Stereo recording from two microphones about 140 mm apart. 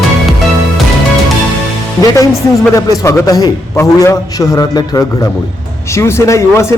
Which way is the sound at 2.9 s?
25° left (ahead or behind).